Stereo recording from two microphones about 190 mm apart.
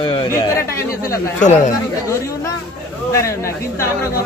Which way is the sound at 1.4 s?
40° left (ahead or behind).